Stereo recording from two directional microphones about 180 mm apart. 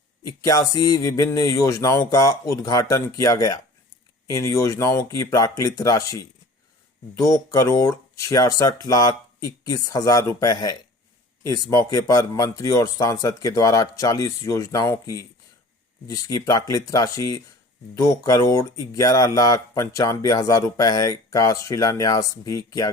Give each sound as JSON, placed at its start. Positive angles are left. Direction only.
{"t": 0.2, "sound": "speech", "side_deg": 20}